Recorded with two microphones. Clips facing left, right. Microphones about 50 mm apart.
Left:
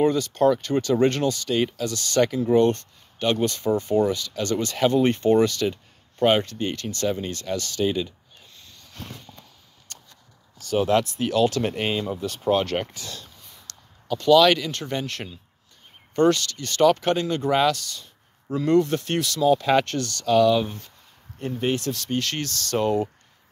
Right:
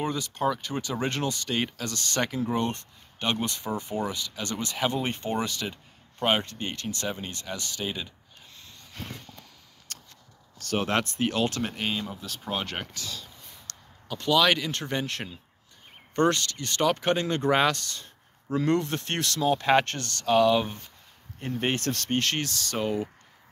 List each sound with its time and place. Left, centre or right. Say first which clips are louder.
0.0 s speech: left 8 dB; centre
1.8 s speech: left 8 dB; right; by 6.4 s centre
6.4 s speech: left 5 dB; right
7.8 s speech: left 11 dB; centre
10.8 s speech: left 6 dB; right
11.6 s speech: left 5 dB; centre
14.1 s speech: left 7 dB; right
17.7 s speech: left 1 dB; right
21.5 s speech: left 3 dB; right
22.8 s speech: left 6 dB; centre